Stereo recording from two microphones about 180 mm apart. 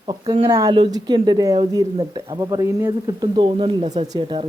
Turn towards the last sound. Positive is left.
turn(degrees=-25)  # may be behind; listen again after turning